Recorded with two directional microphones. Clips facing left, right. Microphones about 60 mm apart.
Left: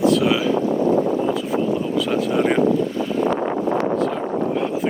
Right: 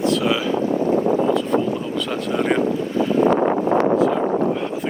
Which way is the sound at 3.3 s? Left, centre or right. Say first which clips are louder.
Right 3 dB; right.